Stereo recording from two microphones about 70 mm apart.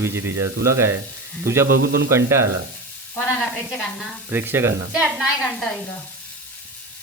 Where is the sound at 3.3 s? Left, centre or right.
Centre.